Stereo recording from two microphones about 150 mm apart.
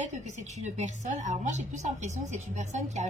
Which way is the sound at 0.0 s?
50° right (ahead or behind).